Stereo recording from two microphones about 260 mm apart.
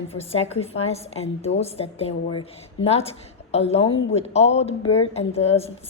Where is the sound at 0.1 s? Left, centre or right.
Left.